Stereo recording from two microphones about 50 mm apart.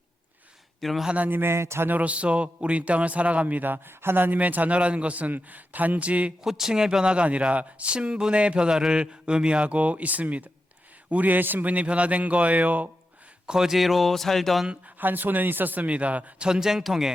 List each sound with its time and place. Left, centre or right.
0.8 s a man's voice: centre
1.3 s speech: right
1.5 s speech: right
1.9 s speech: right
4.4 s speech: right
6.4 s a man's voice: centre; by 12.9 s right
13.5 s speech: centre
14.8 s a man's voice: right
16.5 s a man's voice: centre